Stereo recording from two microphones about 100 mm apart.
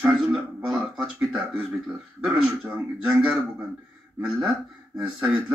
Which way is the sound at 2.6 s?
15° right (ahead or behind).